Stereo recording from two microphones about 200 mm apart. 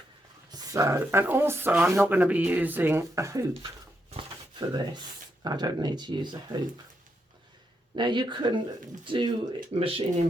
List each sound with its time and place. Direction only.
0.5 s speech: 15° right (ahead or behind)
4.2 s a sound: 25° right (ahead or behind)
5.4 s speech: 20° right (ahead or behind)
7.9 s speech: 20° right (ahead or behind)